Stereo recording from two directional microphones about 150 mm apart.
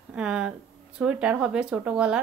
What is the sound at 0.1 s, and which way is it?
Speech, 5° right (ahead or behind).